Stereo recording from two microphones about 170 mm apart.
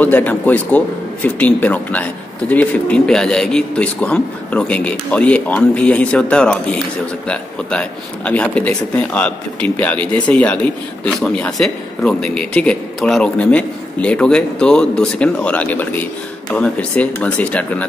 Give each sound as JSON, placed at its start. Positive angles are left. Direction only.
{"t": 0.0, "sound": "a man's voice", "side_deg": 10}